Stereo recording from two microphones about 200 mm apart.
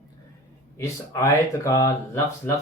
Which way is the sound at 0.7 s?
15° left (ahead or behind).